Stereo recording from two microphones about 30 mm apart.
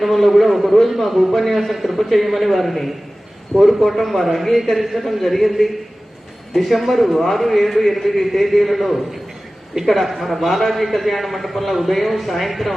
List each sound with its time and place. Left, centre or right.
0.0 s a man's voice: centre
1.3 s a man's voice: centre
1.5 s a man's voice: centre